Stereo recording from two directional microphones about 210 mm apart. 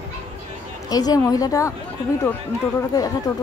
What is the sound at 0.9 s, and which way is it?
Speech, 20° left (ahead or behind).